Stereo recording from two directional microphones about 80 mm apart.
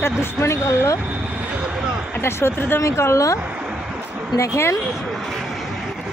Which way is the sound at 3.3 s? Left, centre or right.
Centre.